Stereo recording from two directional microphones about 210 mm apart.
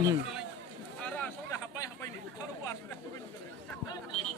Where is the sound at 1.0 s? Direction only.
5° left (ahead or behind).